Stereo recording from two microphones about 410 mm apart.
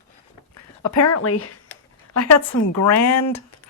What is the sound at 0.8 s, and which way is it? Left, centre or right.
Speech, left.